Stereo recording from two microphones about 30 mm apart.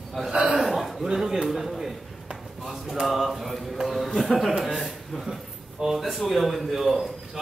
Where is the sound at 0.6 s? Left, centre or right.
Centre.